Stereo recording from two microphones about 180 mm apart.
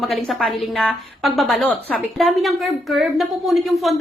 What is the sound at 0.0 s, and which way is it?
A woman's voice, centre (ahead or behind).